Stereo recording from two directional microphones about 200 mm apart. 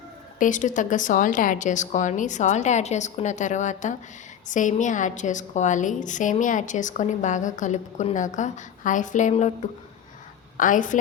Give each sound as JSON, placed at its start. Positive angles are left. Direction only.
{"t": 0.3, "sound": "a woman's voice", "side_deg": 40}
{"t": 10.6, "sound": "a woman's voice", "side_deg": 40}